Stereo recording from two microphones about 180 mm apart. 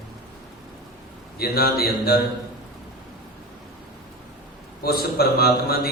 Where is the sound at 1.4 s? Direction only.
60° left (ahead or behind).